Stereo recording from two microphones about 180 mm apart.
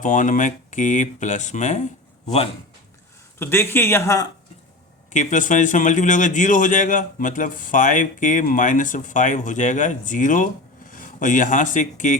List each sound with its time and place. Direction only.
0.0 s a man's voice: 45° left (ahead or behind)
3.3 s speech: 15° left (ahead or behind)
5.1 s a man's voice: 45° left (ahead or behind)